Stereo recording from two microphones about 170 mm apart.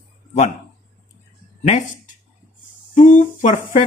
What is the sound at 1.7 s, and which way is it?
Speech, 45° left (ahead or behind).